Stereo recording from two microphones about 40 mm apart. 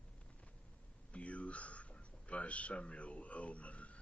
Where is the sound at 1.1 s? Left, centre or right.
Left.